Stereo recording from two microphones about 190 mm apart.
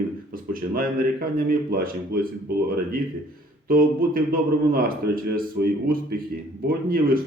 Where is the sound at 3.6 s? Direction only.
50° right (ahead or behind).